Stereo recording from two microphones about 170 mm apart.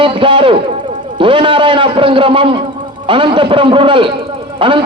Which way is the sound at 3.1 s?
30° right (ahead or behind).